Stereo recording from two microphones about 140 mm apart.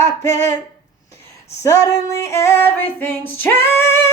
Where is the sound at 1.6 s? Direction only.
25° left (ahead or behind).